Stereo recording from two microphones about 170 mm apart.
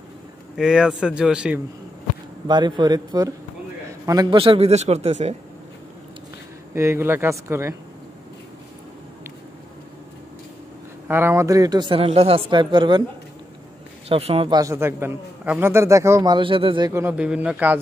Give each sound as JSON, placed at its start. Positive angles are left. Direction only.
{"t": 0.6, "sound": "speech", "side_deg": -5}
{"t": 2.4, "sound": "a man's voice", "side_deg": -25}
{"t": 6.7, "sound": "a man's voice", "side_deg": -15}
{"t": 11.1, "sound": "speech", "side_deg": -15}
{"t": 14.0, "sound": "a man's voice", "side_deg": -35}
{"t": 14.6, "sound": "a man's voice", "side_deg": -15}
{"t": 16.9, "sound": "a man's voice", "side_deg": -10}